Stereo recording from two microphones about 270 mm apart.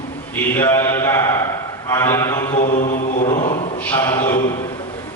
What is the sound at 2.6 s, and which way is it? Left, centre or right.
Mantra, left.